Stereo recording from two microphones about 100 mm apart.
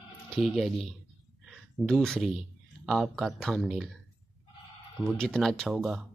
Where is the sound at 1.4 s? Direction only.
Centre (ahead or behind).